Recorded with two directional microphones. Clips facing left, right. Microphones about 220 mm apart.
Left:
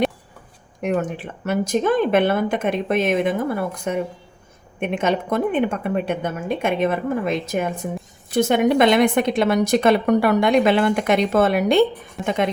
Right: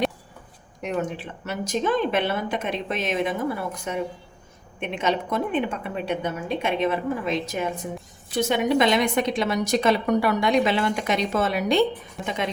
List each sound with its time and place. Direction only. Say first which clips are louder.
0.8 s a woman's voice: left 5 dB; 55° left (ahead or behind)